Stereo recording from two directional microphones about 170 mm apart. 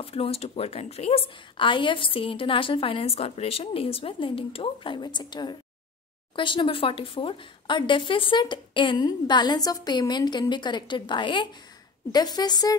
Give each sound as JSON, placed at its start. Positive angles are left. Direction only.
{"t": 0.0, "sound": "a woman's voice", "side_deg": 35}